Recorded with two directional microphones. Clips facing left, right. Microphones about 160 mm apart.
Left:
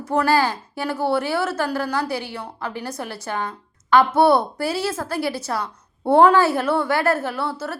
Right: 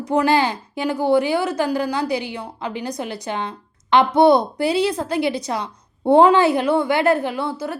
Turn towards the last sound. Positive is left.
turn(degrees=-15)  # may be behind; listen again after turning